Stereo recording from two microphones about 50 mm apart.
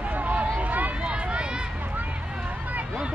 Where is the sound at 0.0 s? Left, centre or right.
Right.